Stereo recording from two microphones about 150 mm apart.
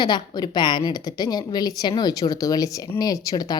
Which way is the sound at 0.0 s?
30° left (ahead or behind).